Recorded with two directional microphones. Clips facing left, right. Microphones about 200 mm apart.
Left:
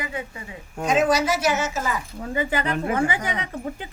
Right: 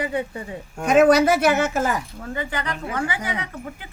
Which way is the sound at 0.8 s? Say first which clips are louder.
Right 5 dB; 60° right (ahead or behind).